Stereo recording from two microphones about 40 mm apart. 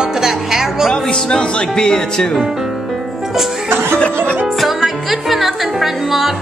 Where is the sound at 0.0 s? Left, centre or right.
Centre.